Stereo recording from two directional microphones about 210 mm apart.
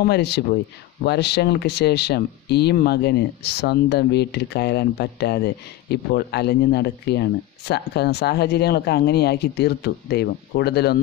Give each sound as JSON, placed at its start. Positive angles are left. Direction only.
{"t": 0.0, "sound": "speech", "side_deg": 50}